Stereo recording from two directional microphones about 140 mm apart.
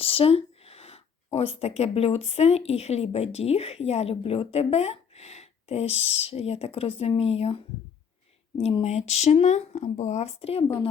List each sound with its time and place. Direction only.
0.0 s speech: 45° left (ahead or behind)